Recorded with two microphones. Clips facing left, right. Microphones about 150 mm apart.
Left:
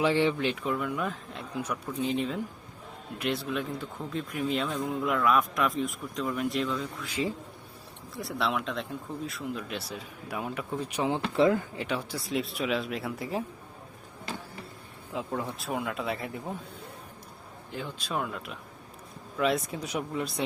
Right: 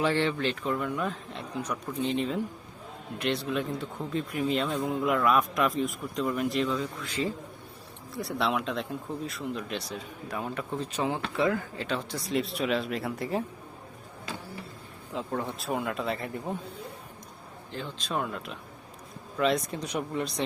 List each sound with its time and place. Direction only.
0.0 s speech: 15° left (ahead or behind)
7.1 s a man's voice: 10° left (ahead or behind)
8.1 s speech: centre (ahead or behind); by 11.9 s 20° left (ahead or behind)
11.9 s speech: 5° left (ahead or behind)
15.1 s speech: 5° left (ahead or behind)
17.7 s speech: 10° left (ahead or behind)